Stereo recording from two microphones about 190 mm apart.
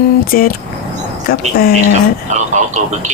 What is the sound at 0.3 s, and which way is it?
Speech, 50° left (ahead or behind).